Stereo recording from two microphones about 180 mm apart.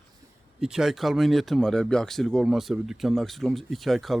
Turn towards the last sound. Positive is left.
turn(degrees=0)  # may be behind; listen again after turning